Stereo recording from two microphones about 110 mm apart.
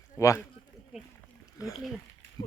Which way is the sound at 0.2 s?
30° left (ahead or behind).